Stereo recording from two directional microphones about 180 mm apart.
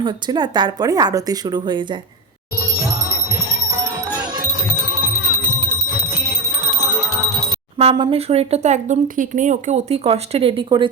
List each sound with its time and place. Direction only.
0.0 s speech: 25° right (ahead or behind)
6.2 s music: 15° right (ahead or behind)
7.8 s speech: 30° right (ahead or behind)